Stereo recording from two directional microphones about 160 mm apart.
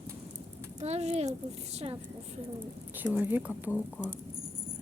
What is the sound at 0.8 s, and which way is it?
A woman's voice, 40° right (ahead or behind).